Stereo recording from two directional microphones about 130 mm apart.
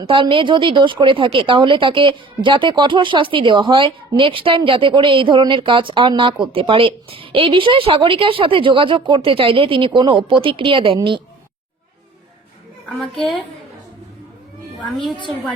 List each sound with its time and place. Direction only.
0.0 s speech: 40° right (ahead or behind)
13.0 s a woman's voice: centre (ahead or behind)
14.8 s a woman's voice: 5° left (ahead or behind)